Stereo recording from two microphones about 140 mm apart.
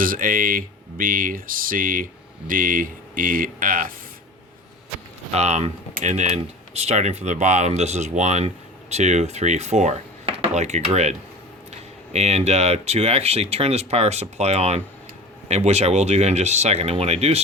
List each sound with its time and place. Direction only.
0.0 s speech: 85° right
5.3 s speech: 55° right (ahead or behind)